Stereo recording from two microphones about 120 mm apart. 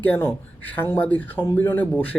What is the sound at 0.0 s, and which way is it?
A man's voice, 20° left (ahead or behind).